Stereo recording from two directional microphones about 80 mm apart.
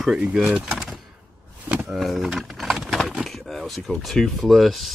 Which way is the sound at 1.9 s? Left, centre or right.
Centre.